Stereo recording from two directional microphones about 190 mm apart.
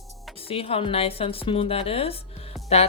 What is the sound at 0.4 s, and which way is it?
A woman's voice, 30° left (ahead or behind).